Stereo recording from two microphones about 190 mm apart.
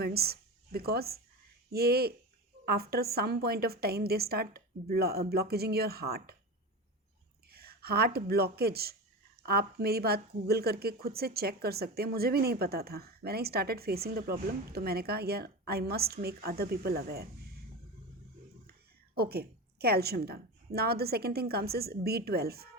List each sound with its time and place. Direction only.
0.0 s speech: 55° right (ahead or behind)
7.5 s speech: 55° right (ahead or behind)
19.1 s speech: 55° right (ahead or behind)